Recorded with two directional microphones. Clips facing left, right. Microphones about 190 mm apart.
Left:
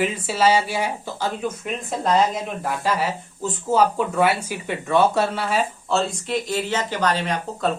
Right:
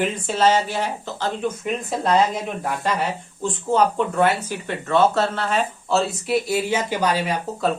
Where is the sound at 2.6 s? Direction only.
Centre (ahead or behind).